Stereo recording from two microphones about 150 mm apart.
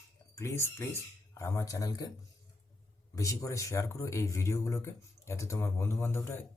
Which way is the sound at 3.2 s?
20° left (ahead or behind).